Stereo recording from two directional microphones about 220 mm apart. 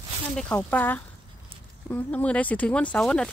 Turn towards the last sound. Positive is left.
turn(degrees=5)  # may be behind; listen again after turning